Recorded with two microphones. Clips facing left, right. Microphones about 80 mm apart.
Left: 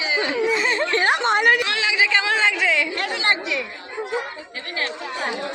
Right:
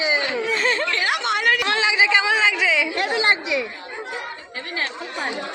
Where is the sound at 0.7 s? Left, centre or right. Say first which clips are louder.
Left 3 dB; left.